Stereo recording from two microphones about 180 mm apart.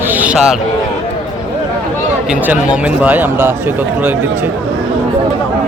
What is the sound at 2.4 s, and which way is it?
Speech, 10° right (ahead or behind).